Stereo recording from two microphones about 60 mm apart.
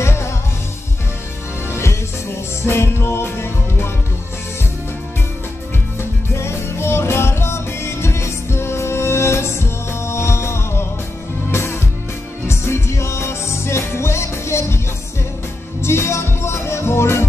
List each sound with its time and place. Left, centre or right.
0.0 s music: left
1.7 s music: left
5.9 s music: left
15.8 s music: left